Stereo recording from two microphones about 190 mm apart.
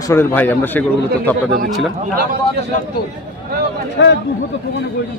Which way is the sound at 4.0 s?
70° left (ahead or behind).